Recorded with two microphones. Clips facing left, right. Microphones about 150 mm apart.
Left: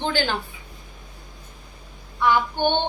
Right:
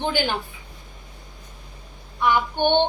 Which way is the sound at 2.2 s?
20° right (ahead or behind).